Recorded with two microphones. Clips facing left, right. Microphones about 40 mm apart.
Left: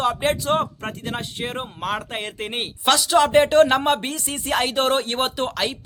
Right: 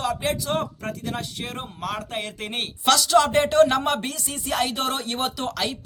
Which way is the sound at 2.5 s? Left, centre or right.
Centre.